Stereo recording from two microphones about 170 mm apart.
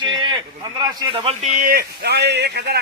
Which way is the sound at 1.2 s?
40° right (ahead or behind).